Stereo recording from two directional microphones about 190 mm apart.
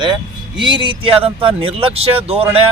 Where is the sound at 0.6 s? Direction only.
25° right (ahead or behind).